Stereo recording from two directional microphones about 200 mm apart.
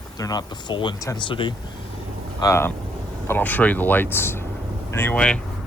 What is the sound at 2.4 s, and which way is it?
Speech, 15° left (ahead or behind).